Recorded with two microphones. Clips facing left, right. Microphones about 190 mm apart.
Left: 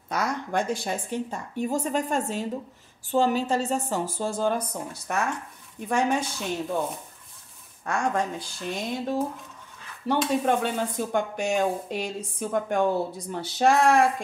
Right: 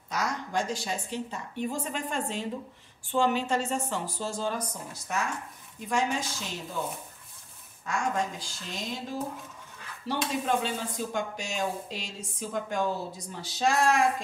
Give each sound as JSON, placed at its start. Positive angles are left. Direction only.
{"t": 0.1, "sound": "a woman's voice", "side_deg": 55}
{"t": 7.8, "sound": "speech", "side_deg": 55}